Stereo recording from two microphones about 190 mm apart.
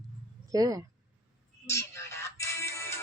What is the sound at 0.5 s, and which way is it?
Speech, 20° right (ahead or behind).